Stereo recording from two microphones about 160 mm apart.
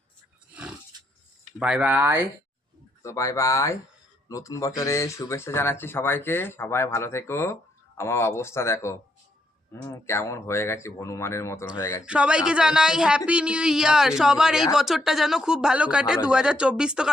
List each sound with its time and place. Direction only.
0.5 s roaring cats: 5° right (ahead or behind)
1.5 s speech: 5° right (ahead or behind)
3.0 s speech: 20° left (ahead or behind)
12.0 s speech: 5° right (ahead or behind)